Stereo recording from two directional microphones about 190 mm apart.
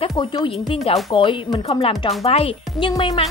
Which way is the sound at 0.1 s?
20° left (ahead or behind).